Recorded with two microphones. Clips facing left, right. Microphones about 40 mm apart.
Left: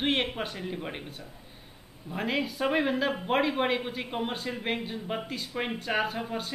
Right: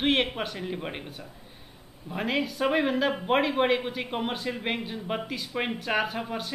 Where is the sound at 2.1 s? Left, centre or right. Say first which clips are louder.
Right 2 dB; centre.